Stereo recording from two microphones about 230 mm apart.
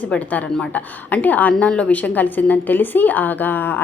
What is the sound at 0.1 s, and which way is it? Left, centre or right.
A woman's voice, centre.